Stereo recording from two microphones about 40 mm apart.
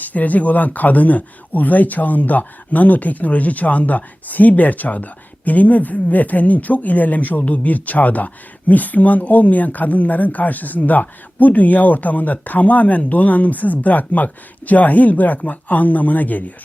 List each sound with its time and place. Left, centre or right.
0.0 s speech: left